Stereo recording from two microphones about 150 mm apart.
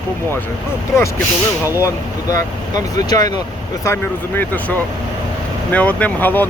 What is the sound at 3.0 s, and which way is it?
Speech, 25° left (ahead or behind).